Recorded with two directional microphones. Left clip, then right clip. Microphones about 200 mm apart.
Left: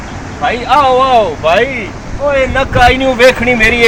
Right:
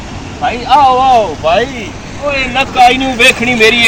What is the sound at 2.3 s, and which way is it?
Speech, 10° left (ahead or behind).